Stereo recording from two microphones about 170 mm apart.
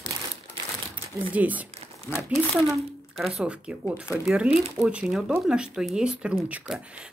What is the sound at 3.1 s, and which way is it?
A woman's voice, centre (ahead or behind).